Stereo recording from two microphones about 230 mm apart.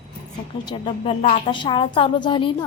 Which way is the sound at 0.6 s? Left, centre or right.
Left.